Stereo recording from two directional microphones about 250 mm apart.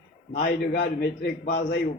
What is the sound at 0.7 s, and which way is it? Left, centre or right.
A man's voice, left.